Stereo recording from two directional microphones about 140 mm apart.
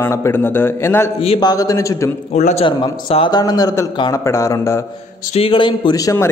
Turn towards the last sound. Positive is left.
turn(degrees=25)  # may be behind; listen again after turning